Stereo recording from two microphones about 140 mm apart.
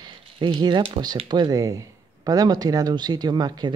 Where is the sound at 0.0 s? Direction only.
35° right (ahead or behind).